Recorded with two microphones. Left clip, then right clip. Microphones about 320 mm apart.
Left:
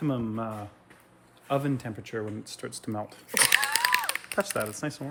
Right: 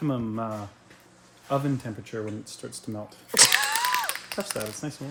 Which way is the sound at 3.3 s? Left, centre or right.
Centre.